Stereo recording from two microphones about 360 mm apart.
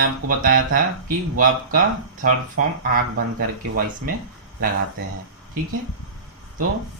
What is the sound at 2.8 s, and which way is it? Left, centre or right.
Speech, right.